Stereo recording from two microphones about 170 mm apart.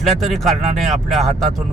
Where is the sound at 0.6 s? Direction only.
40° right (ahead or behind).